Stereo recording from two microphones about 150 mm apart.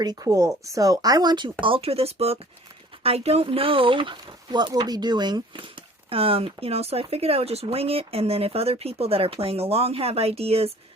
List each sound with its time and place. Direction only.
0.0 s speech: 25° right (ahead or behind)
1.6 s speech: 40° right (ahead or behind)